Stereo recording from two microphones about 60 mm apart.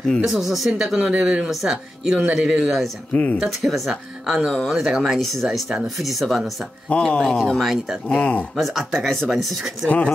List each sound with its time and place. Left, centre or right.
0.2 s speech: centre
3.1 s speech: left
3.4 s speech: centre
6.9 s speech: centre
7.5 s speech: centre
8.1 s speech: left
8.5 s speech: centre
9.8 s speech: left